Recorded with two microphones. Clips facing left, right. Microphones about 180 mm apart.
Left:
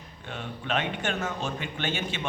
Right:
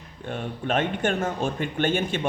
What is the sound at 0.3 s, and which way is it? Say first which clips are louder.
Speech: right 5 dB; 50° right (ahead or behind).